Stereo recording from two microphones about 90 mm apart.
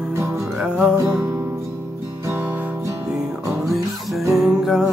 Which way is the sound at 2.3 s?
25° right (ahead or behind).